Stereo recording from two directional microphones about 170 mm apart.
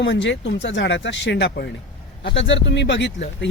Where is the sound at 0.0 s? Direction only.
90° left.